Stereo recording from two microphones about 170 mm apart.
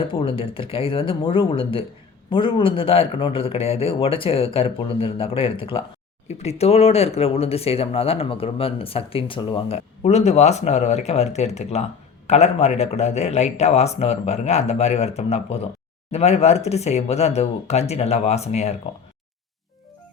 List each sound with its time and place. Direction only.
0.1 s speech: 30° left (ahead or behind)